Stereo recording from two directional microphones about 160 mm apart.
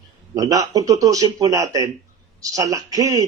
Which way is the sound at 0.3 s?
20° right (ahead or behind).